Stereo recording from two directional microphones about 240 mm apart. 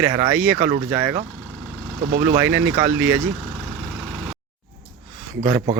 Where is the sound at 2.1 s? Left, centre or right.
Right.